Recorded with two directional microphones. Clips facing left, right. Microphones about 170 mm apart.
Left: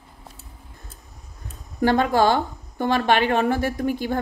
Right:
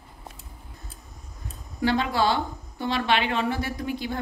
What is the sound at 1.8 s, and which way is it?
A woman's voice, 50° left (ahead or behind).